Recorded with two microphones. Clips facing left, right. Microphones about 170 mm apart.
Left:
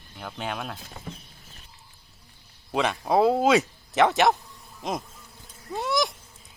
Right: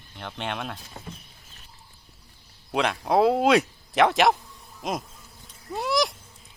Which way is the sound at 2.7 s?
Centre (ahead or behind).